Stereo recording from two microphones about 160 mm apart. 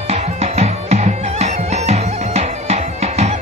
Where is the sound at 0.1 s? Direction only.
40° right (ahead or behind).